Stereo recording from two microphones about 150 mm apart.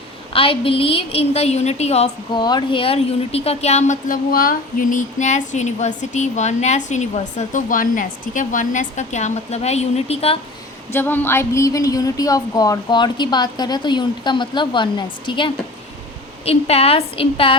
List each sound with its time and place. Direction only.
0.3 s a woman's voice: 35° left (ahead or behind)
2.3 s a woman's voice: 30° left (ahead or behind); by 3.9 s 50° left (ahead or behind)
4.1 s speech: 70° left (ahead or behind); by 10.3 s 40° left (ahead or behind)
10.9 s a woman's voice: 15° left (ahead or behind); by 17.5 s 35° left (ahead or behind)